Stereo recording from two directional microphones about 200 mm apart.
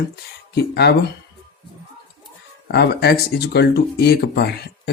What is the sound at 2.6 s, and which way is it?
Speech, 55° left (ahead or behind).